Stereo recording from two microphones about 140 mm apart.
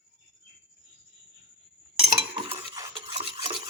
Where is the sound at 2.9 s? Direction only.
40° right (ahead or behind).